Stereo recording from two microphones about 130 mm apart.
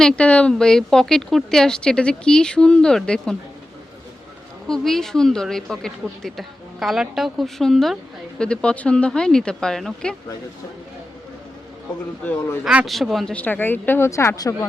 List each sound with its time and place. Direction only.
0.0 s a woman's voice: 10° left (ahead or behind)
4.7 s a woman's voice: 5° left (ahead or behind)
12.2 s speech: 10° left (ahead or behind)
12.6 s a woman's voice: centre (ahead or behind)
13.3 s speech: 15° left (ahead or behind)